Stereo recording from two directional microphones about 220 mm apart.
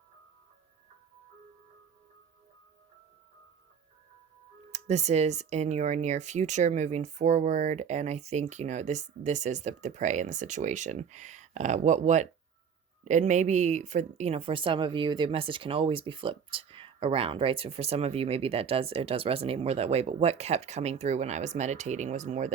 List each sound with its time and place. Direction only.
4.7 s speech: 30° right (ahead or behind)